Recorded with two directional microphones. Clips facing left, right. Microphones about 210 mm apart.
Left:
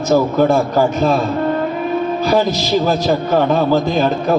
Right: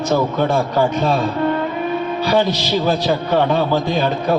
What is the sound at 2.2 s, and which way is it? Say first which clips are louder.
A man's voice: even; 45° left (ahead or behind).